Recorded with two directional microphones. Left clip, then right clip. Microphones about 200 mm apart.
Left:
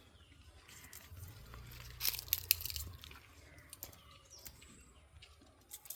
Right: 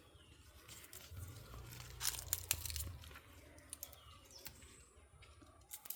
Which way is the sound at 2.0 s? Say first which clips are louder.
Left 4 dB; 5° right (ahead or behind).